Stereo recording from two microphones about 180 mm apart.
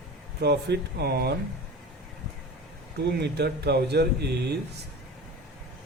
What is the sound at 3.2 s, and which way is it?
Speech, 65° right (ahead or behind).